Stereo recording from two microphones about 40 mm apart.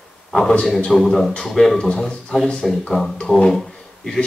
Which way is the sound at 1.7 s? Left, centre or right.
Left.